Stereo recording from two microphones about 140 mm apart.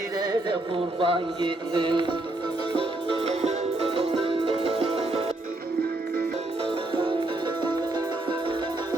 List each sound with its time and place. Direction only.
0.9 s music: 35° right (ahead or behind)
7.6 s music: 35° right (ahead or behind)